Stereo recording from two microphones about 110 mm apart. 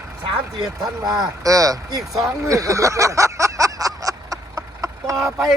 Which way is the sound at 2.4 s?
30° right (ahead or behind).